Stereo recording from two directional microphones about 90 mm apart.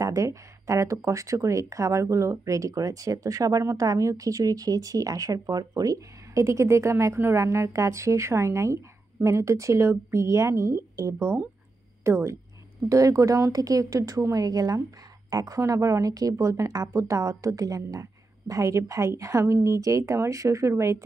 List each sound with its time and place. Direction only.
0.0 s speech: 40° right (ahead or behind)